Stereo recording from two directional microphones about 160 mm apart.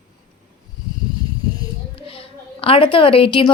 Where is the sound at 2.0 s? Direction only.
35° left (ahead or behind).